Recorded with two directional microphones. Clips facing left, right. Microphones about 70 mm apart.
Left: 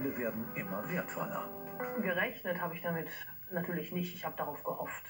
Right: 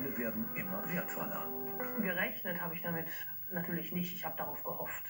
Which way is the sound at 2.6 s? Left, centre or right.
Centre.